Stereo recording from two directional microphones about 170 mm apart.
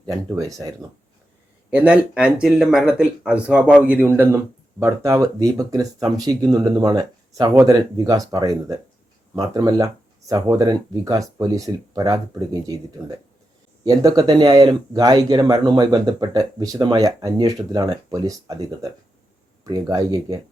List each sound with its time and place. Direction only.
0.3 s speech: 20° right (ahead or behind)
1.7 s speech: 5° right (ahead or behind)
13.8 s speech: 20° right (ahead or behind)